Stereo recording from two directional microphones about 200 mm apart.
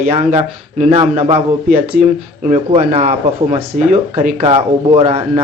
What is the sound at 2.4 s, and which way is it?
Speech, 30° right (ahead or behind).